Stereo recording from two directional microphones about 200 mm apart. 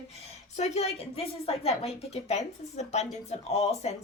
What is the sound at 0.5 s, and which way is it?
A woman's voice, 35° left (ahead or behind).